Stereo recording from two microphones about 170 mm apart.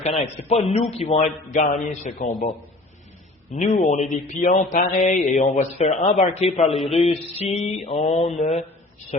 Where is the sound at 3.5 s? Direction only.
45° left (ahead or behind).